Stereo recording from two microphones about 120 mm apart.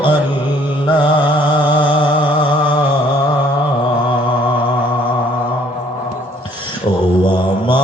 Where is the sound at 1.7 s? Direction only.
45° left (ahead or behind).